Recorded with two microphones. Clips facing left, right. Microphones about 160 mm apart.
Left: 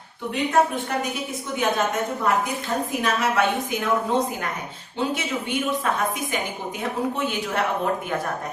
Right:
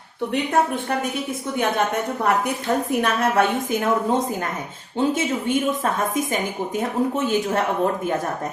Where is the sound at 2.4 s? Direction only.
60° right (ahead or behind).